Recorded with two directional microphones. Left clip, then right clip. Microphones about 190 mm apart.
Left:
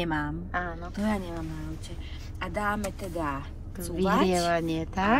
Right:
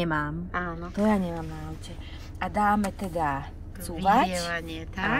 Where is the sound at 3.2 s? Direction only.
55° right (ahead or behind).